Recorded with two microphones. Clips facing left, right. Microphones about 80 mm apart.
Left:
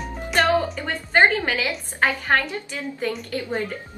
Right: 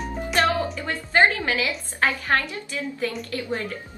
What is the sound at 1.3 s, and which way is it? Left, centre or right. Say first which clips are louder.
A woman's voice: left 1 dB; left.